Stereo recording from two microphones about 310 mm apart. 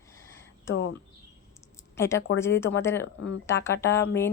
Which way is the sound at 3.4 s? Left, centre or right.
Centre.